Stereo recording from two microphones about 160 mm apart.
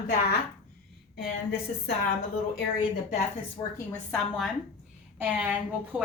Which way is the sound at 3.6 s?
30° left (ahead or behind).